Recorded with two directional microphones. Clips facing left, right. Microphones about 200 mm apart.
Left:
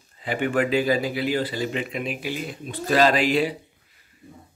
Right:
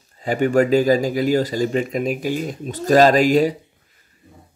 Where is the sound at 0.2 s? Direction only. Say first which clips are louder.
Right 6 dB; 40° right (ahead or behind).